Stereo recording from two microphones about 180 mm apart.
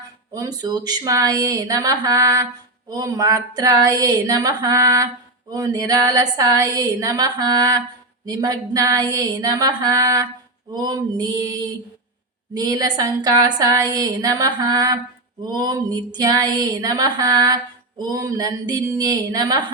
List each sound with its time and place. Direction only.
0.3 s speech: 20° right (ahead or behind)